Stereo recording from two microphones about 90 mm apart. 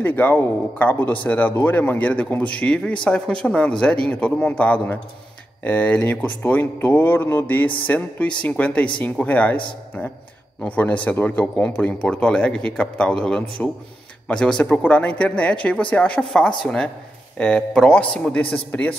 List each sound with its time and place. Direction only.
0.0 s speech: 20° left (ahead or behind)
10.6 s speech: 15° left (ahead or behind)